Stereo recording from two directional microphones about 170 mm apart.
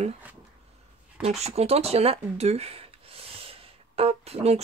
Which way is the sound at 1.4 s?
40° right (ahead or behind).